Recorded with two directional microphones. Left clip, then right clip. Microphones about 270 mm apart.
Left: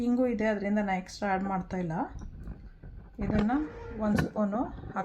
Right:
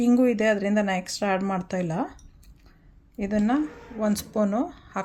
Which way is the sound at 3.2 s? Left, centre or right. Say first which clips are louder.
Right 5 dB; right.